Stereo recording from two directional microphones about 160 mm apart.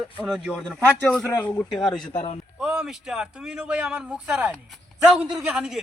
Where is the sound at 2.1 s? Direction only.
40° left (ahead or behind).